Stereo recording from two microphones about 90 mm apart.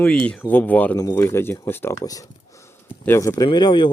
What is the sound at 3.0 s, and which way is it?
Speech, 25° left (ahead or behind).